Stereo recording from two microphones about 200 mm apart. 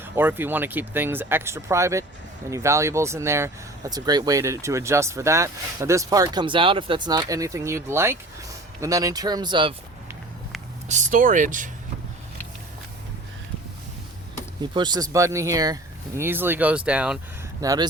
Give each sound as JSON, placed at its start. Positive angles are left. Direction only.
{"t": 0.0, "sound": "speech", "side_deg": -10}
{"t": 10.8, "sound": "speech", "side_deg": -40}
{"t": 14.6, "sound": "speech", "side_deg": -20}
{"t": 17.6, "sound": "speech", "side_deg": -15}